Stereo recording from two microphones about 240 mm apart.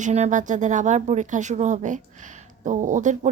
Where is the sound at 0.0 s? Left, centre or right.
Right.